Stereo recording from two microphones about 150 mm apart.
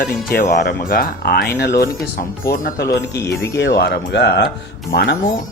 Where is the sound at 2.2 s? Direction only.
70° left (ahead or behind).